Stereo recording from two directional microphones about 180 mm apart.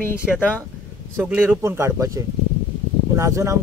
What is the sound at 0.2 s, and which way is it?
Speech, centre (ahead or behind).